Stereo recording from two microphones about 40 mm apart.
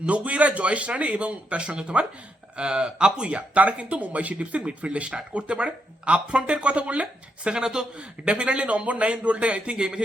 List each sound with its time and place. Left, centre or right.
0.0 s speech: right